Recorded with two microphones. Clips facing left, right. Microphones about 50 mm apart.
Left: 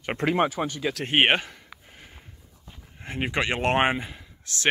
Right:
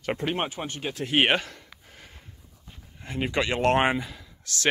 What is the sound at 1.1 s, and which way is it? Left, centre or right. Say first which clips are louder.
Speech: left 1 dB; left.